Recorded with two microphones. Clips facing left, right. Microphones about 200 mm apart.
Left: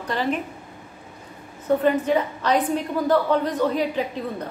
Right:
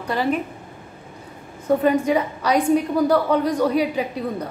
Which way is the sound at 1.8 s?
10° right (ahead or behind).